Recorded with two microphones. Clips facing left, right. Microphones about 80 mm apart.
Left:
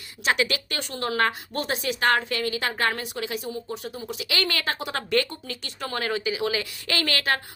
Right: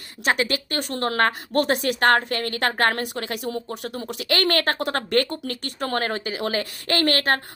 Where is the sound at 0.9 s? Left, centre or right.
Right.